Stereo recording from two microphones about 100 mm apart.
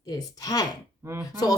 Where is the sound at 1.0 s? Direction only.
30° right (ahead or behind).